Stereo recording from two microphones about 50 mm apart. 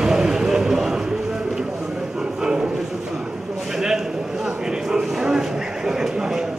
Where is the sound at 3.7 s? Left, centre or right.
Centre.